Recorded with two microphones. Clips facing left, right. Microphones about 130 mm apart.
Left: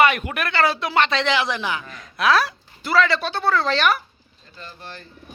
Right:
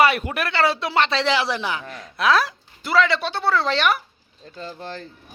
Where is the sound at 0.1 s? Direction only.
30° right (ahead or behind).